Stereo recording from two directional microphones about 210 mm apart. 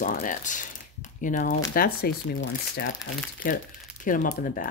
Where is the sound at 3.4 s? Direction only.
40° left (ahead or behind).